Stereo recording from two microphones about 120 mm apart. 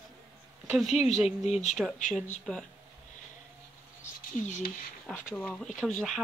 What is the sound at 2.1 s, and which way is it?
Speech, 5° left (ahead or behind).